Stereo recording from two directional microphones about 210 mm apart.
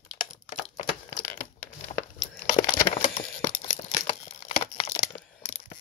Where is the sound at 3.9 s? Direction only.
25° left (ahead or behind).